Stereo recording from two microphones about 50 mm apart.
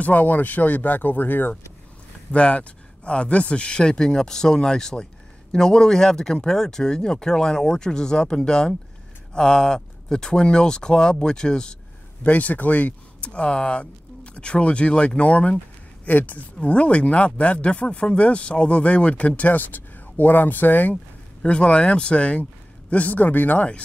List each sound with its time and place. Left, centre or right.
0.0 s speech: left
2.3 s speech: left
12.2 s speech: left
13.2 s speech: left
16.6 s speech: left
20.9 s speech: left